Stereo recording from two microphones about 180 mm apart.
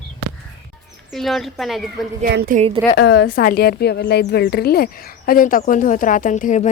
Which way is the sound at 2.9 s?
70° left (ahead or behind).